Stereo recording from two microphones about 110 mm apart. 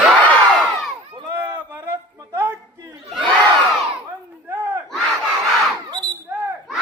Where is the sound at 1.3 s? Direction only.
25° right (ahead or behind).